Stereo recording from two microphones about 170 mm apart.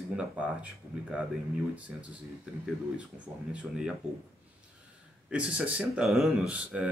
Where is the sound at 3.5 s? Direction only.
5° right (ahead or behind).